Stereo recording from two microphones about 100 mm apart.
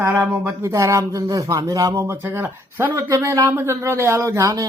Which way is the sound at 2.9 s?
30° right (ahead or behind).